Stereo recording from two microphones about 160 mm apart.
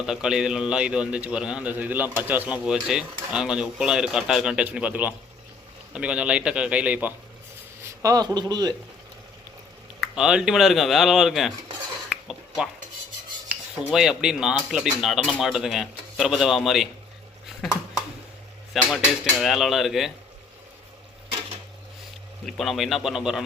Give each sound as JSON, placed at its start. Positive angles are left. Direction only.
{"t": 0.0, "sound": "a man's voice", "side_deg": -5}
{"t": 7.8, "sound": "a man's voice", "side_deg": -20}
{"t": 10.0, "sound": "a man's voice", "side_deg": -5}
{"t": 12.0, "sound": "dishes", "side_deg": -5}
{"t": 13.5, "sound": "a man's voice", "side_deg": -5}
{"t": 18.7, "sound": "a man's voice", "side_deg": 0}
{"t": 22.4, "sound": "a man's voice", "side_deg": 0}